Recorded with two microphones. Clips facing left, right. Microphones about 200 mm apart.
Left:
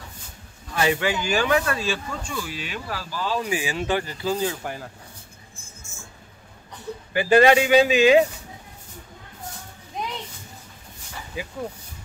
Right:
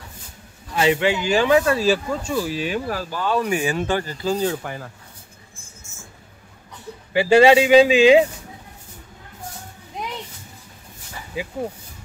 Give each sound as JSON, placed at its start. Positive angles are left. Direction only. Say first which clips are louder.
{"t": 0.7, "sound": "speech", "louder": "right 4 dB", "side_deg": -25}
{"t": 1.8, "sound": "speech", "louder": "right 8 dB", "side_deg": -40}
{"t": 7.2, "sound": "speech", "louder": "right 3 dB", "side_deg": -25}